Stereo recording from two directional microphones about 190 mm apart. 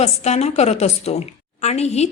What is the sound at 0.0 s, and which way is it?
A woman's voice, 35° left (ahead or behind).